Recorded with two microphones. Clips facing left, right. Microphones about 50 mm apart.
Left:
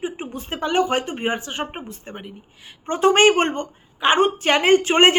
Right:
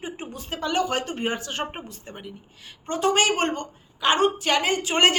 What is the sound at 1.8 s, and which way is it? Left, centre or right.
A woman's voice, left.